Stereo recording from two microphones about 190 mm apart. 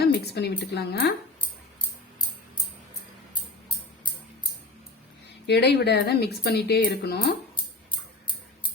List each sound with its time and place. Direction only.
0.0 s a woman's voice: 60° left (ahead or behind)
5.5 s speech: 60° left (ahead or behind)